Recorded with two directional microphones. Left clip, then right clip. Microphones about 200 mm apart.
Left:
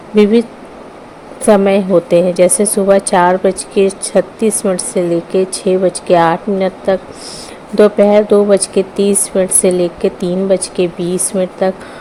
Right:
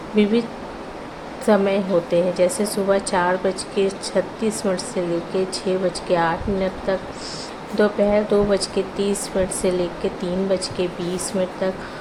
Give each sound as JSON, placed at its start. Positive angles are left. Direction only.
{"t": 1.5, "sound": "a woman's voice", "side_deg": 40}